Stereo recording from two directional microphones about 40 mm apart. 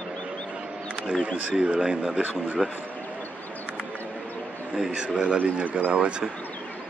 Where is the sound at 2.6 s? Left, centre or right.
Centre.